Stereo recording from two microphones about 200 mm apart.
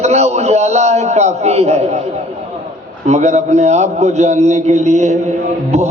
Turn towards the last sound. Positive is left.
turn(degrees=-30)  # may be behind; listen again after turning